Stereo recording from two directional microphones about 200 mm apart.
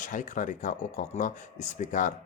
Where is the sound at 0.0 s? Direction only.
40° left (ahead or behind).